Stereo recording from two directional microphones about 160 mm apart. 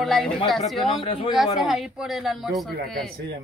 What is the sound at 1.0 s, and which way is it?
Speech, 35° left (ahead or behind).